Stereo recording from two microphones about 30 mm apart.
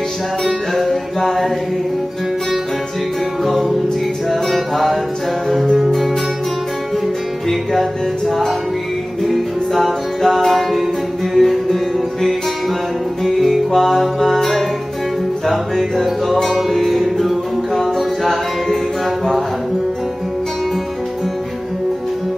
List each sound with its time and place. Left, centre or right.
0.4 s music: centre
3.4 s music: centre
7.4 s music: centre